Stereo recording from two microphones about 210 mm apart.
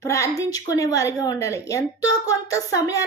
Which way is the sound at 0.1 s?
15° left (ahead or behind).